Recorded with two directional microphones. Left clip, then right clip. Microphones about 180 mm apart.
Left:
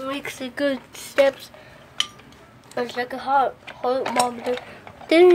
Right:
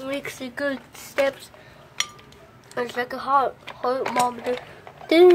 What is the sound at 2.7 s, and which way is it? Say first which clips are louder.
Speech: left 1 dB; centre (ahead or behind).